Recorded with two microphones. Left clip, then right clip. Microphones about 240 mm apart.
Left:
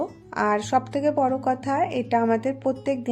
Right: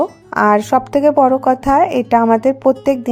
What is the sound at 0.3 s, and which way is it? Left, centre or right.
Speech, right.